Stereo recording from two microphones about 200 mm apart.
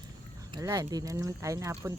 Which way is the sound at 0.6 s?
20° right (ahead or behind).